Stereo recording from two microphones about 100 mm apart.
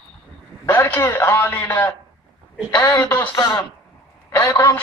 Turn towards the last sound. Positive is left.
turn(degrees=30)  # may be behind; listen again after turning